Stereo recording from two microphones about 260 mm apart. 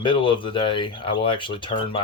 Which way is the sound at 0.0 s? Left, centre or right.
Centre.